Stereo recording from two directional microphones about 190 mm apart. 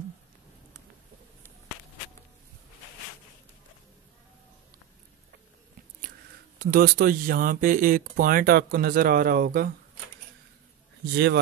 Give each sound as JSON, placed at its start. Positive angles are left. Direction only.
{"t": 6.6, "sound": "speech", "side_deg": -50}